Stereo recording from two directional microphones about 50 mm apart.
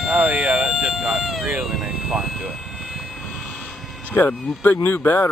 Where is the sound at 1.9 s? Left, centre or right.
Centre.